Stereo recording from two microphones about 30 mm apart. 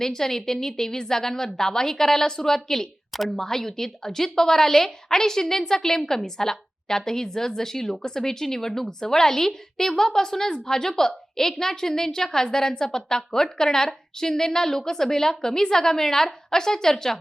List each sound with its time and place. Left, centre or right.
0.0 s a woman's voice: centre